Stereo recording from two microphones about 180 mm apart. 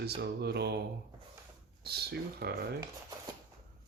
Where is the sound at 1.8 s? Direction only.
60° right (ahead or behind).